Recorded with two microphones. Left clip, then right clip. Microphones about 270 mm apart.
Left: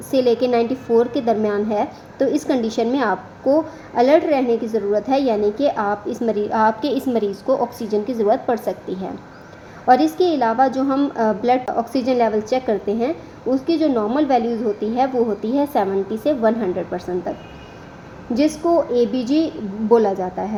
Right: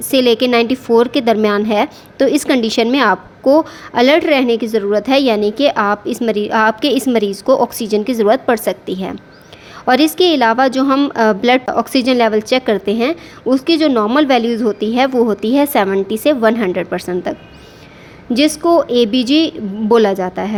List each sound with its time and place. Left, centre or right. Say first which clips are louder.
0.1 s a woman's voice: right 5 dB; right
18.3 s a woman's voice: right 5 dB; right
18.6 s a woman's voice: right 6 dB; right
18.9 s a woman's voice: right 5 dB; right